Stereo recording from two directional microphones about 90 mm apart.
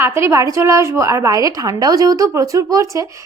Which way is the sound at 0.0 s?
30° right (ahead or behind).